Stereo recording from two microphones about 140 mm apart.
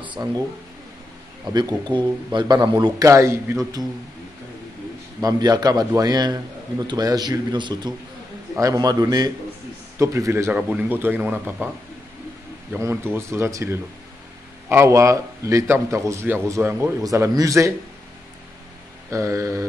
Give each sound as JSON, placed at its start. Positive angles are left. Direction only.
{"t": 0.2, "sound": "a man's voice", "side_deg": -25}
{"t": 1.4, "sound": "a man's voice", "side_deg": -25}
{"t": 5.2, "sound": "a man's voice", "side_deg": -25}
{"t": 12.7, "sound": "a man's voice", "side_deg": -15}
{"t": 19.0, "sound": "a man's voice", "side_deg": -20}